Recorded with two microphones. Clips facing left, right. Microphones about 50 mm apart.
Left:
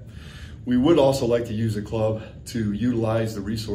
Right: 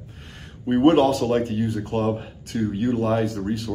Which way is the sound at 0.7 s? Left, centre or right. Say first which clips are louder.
Right 1 dB; right.